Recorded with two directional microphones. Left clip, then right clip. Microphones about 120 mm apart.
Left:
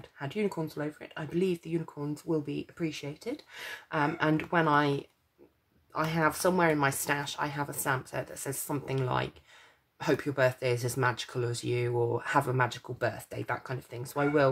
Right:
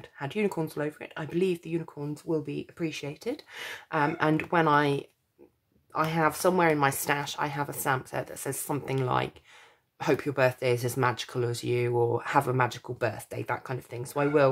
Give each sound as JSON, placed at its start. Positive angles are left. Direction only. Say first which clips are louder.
{"t": 0.2, "sound": "speech", "louder": "right 3 dB", "side_deg": -35}
{"t": 3.0, "sound": "speech", "louder": "right 4 dB", "side_deg": -35}